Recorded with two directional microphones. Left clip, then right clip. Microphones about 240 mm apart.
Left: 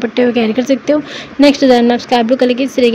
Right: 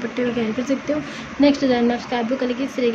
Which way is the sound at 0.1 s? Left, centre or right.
Left.